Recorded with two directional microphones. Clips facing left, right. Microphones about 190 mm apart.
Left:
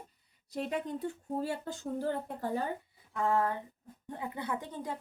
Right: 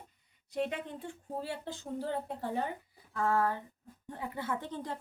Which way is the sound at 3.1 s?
20° left (ahead or behind).